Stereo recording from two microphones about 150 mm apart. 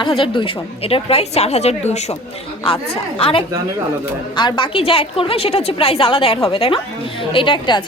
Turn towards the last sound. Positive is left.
turn(degrees=35)  # may be behind; listen again after turning